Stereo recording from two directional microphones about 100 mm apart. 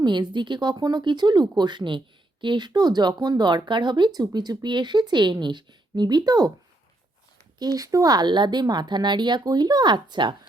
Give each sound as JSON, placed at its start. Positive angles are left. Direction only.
{"t": 0.0, "sound": "speech", "side_deg": -50}
{"t": 7.6, "sound": "speech", "side_deg": -35}